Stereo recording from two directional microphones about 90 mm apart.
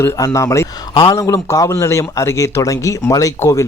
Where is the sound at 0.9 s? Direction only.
65° left (ahead or behind).